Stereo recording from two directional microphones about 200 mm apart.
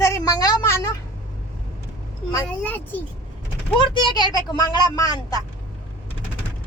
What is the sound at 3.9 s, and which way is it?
Speech, 20° left (ahead or behind).